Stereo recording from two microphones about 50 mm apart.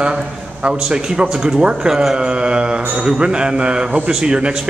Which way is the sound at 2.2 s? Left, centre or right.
Centre.